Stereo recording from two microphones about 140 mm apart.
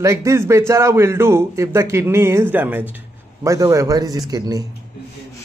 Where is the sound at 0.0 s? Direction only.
20° right (ahead or behind).